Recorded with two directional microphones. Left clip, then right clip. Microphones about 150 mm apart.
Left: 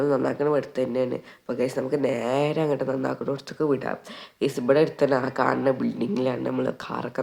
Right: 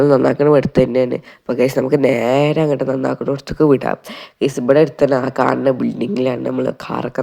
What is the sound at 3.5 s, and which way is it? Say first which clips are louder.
Speech: right 12 dB; 50° right (ahead or behind).